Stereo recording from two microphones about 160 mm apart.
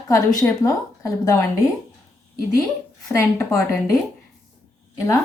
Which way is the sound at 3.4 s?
20° left (ahead or behind).